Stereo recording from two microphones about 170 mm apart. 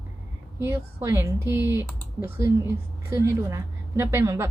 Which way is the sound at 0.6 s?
15° right (ahead or behind).